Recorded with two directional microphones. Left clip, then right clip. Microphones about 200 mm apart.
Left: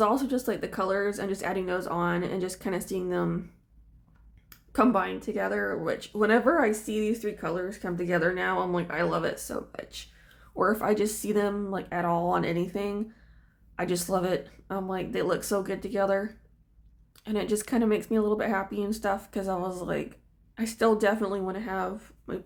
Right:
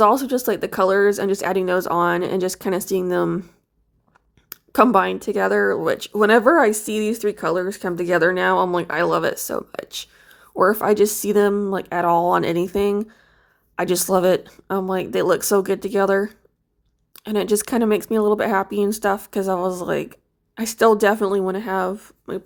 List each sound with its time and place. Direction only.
0.0 s speech: 40° right (ahead or behind)